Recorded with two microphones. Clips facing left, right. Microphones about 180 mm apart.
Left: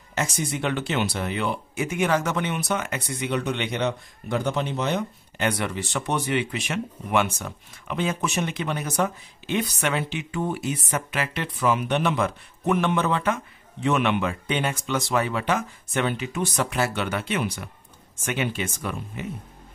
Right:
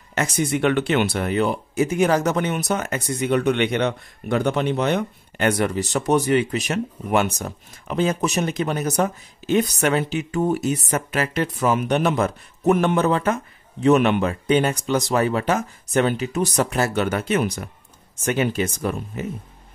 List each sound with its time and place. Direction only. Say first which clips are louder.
0.1 s speech: right 5 dB; 60° right (ahead or behind); by 19.2 s 40° right (ahead or behind)